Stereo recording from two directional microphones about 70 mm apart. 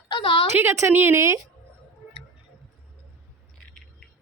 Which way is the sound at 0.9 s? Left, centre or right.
Right.